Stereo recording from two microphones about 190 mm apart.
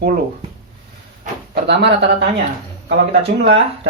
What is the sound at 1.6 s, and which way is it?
Speech, 65° right (ahead or behind).